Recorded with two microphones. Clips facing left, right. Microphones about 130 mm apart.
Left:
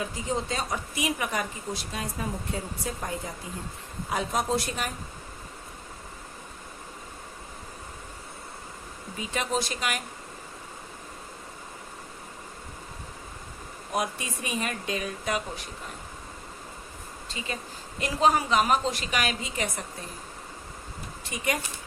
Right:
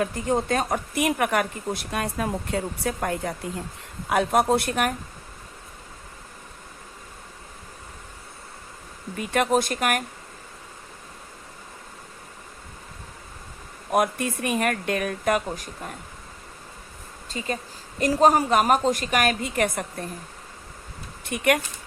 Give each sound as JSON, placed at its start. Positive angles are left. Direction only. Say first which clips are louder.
{"t": 0.0, "sound": "speech", "louder": "right 6 dB", "side_deg": -55}
{"t": 9.1, "sound": "speech", "louder": "right 7 dB", "side_deg": -60}
{"t": 13.9, "sound": "speech", "louder": "right 8 dB", "side_deg": -55}
{"t": 17.2, "sound": "a woman's voice", "louder": "right 6 dB", "side_deg": -45}
{"t": 21.2, "sound": "speech", "louder": "right 8 dB", "side_deg": -65}